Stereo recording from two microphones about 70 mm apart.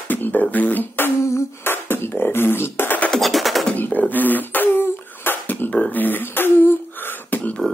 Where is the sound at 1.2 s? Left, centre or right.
Left.